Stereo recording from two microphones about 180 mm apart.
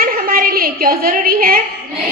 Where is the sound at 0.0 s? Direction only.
50° right (ahead or behind).